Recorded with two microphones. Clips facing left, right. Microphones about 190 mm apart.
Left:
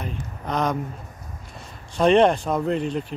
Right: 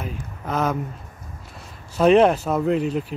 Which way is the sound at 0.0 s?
5° right (ahead or behind).